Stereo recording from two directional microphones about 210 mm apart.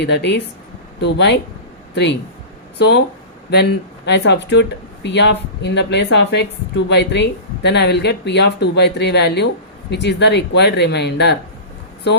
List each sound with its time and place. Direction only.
0.0 s a woman's voice: 55° left (ahead or behind)
2.7 s a woman's voice: 55° left (ahead or behind)